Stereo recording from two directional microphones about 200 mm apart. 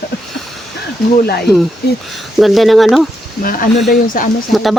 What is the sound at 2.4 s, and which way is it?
Speech, centre (ahead or behind).